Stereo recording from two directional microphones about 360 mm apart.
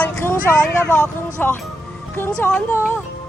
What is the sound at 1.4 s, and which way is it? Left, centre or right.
Music, centre.